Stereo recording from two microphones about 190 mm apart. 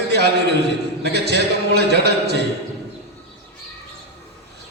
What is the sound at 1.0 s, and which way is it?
A man's voice, 60° right (ahead or behind).